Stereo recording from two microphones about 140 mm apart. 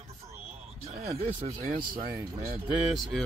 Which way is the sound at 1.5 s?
85° right.